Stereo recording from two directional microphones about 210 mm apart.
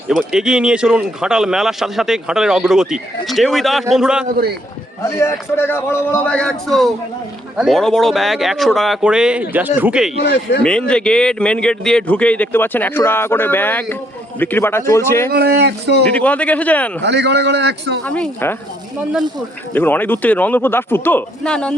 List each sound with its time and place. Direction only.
0.1 s a man's voice: 5° right (ahead or behind)
5.0 s a man's voice: 15° left (ahead or behind); by 10.1 s 5° right (ahead or behind)
10.2 s speech: 50° left (ahead or behind)
10.6 s speech: 5° left (ahead or behind)
15.3 s speech: 50° right (ahead or behind)
16.1 s speech: 5° left (ahead or behind)
17.0 s a man's voice: 55° right (ahead or behind)
18.0 s speech: 5° left (ahead or behind)
19.7 s speech: 10° left (ahead or behind)